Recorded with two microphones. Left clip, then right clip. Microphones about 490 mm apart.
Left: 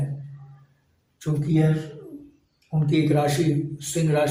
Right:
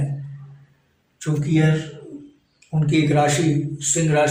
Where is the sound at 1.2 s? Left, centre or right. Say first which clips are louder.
Right 3 dB; left.